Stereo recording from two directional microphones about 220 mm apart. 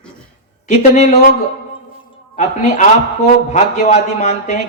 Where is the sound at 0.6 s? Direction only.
30° left (ahead or behind).